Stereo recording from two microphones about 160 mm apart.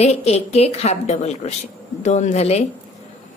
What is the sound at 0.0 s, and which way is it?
A woman's voice, 40° left (ahead or behind).